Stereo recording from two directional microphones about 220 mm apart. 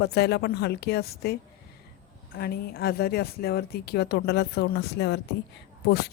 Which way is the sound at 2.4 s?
45° left (ahead or behind).